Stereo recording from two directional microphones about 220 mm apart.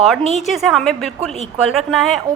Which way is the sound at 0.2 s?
30° right (ahead or behind).